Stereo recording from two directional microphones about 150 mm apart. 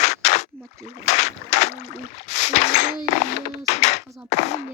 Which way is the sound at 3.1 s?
45° left (ahead or behind).